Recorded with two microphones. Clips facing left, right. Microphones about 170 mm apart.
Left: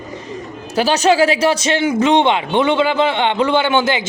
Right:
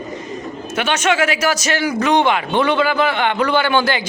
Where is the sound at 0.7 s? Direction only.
35° left (ahead or behind).